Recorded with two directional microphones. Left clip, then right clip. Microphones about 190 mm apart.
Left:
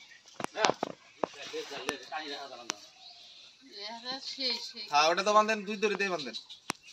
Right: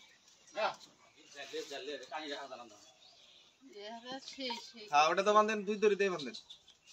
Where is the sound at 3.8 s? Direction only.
25° right (ahead or behind).